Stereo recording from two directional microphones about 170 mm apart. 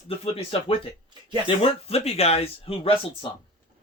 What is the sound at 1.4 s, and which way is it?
Speech, 35° left (ahead or behind).